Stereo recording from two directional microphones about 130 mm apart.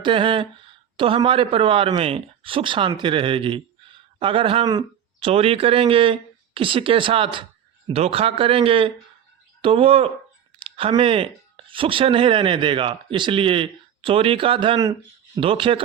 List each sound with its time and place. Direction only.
0.0 s speech: 40° right (ahead or behind)